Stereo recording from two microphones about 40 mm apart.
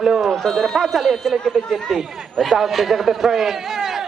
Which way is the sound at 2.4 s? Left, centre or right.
Centre.